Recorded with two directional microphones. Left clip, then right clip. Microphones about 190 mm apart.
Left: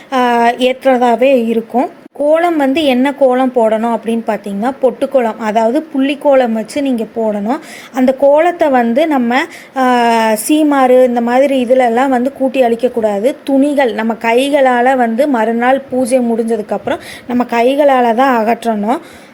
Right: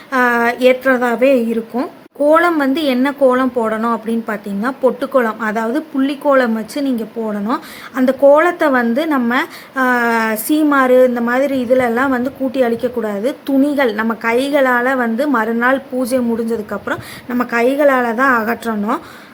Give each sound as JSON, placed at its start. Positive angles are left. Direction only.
{"t": 0.1, "sound": "a woman's voice", "side_deg": 15}